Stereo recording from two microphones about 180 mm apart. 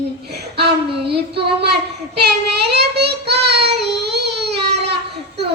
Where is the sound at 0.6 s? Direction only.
65° right (ahead or behind).